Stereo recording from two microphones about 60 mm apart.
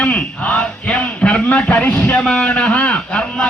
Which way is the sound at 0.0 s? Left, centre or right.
Left.